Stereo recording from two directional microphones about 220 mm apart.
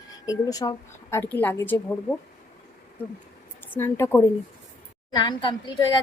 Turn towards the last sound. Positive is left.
turn(degrees=20)  # may be behind; listen again after turning